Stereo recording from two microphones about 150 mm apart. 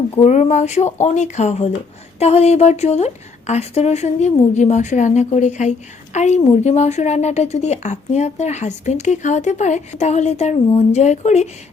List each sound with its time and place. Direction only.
0.3 s speech: 50° left (ahead or behind)